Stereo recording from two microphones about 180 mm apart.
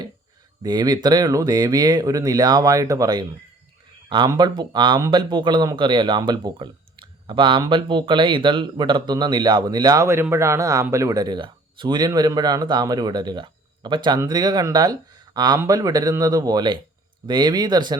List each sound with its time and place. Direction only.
0.6 s speech: 20° right (ahead or behind)